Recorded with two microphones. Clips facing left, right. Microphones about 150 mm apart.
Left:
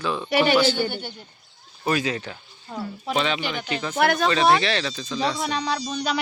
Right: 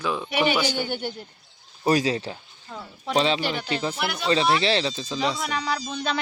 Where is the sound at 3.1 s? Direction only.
30° right (ahead or behind).